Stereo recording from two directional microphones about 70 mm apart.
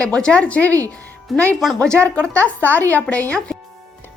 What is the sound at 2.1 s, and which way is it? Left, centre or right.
A woman's voice, centre.